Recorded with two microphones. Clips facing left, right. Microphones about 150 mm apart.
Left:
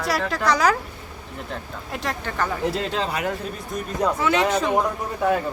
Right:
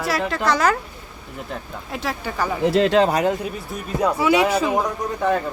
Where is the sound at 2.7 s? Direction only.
75° right (ahead or behind).